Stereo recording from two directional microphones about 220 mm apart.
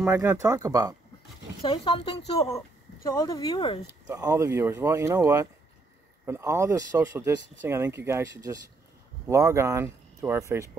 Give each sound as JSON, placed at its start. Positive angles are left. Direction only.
{"t": 0.0, "sound": "speech", "side_deg": -10}
{"t": 1.6, "sound": "a woman's voice", "side_deg": 20}
{"t": 4.1, "sound": "speech", "side_deg": -15}